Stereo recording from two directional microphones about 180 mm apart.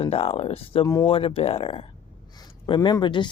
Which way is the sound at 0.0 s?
35° left (ahead or behind).